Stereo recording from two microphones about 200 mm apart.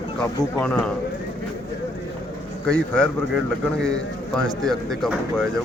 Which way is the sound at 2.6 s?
5° left (ahead or behind).